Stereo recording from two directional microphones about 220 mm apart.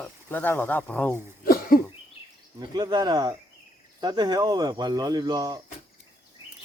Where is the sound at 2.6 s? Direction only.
20° right (ahead or behind).